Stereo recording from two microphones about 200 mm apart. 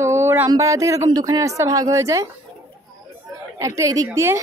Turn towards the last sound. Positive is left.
turn(degrees=-15)  # may be behind; listen again after turning